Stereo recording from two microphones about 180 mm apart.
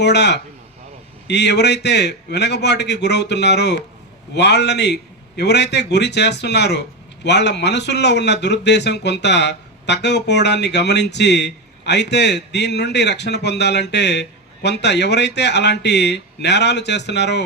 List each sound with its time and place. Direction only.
0.0 s speech: 70° left (ahead or behind)